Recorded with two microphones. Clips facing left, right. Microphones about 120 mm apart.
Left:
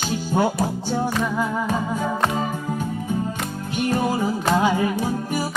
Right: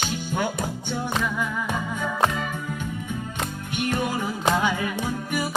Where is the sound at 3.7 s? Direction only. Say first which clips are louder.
Left 4 dB; 35° left (ahead or behind).